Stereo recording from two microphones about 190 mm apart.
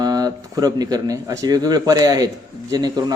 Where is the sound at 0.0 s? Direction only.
20° right (ahead or behind).